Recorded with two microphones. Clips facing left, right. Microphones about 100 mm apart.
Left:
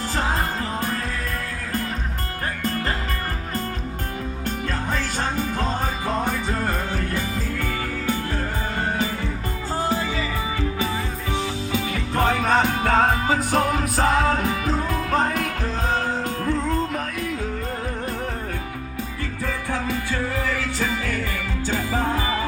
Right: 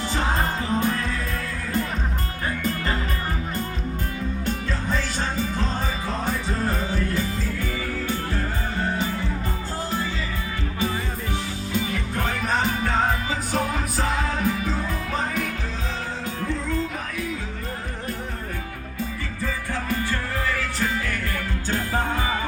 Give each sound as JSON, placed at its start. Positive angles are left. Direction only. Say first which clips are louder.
{"t": 9.9, "sound": "music", "louder": "left 3 dB", "side_deg": 90}
{"t": 11.7, "sound": "music", "louder": "right 1 dB", "side_deg": 80}
{"t": 15.1, "sound": "music", "louder": "left 5 dB", "side_deg": 60}